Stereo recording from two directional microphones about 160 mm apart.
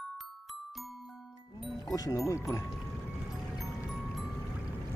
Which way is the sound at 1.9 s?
20° left (ahead or behind).